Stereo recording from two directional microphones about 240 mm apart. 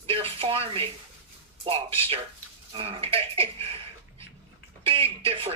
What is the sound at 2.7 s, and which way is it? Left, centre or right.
Speech, right.